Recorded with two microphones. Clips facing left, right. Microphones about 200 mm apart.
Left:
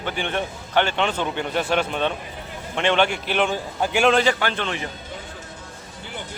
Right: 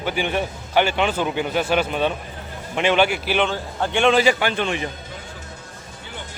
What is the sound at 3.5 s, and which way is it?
Speech, 10° left (ahead or behind).